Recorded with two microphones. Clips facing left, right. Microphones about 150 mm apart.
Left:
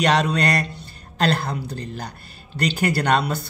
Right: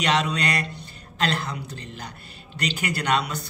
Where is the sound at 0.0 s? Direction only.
40° left (ahead or behind).